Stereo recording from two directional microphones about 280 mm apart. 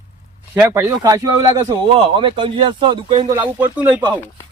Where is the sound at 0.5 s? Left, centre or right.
Centre.